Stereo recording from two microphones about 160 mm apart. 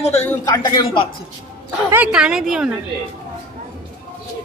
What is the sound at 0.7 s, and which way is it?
Speech, 25° left (ahead or behind).